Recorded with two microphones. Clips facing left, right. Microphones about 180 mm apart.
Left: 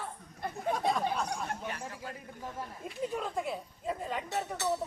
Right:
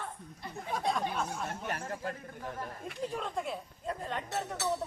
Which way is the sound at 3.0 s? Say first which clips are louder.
Left 2 dB; 5° left (ahead or behind).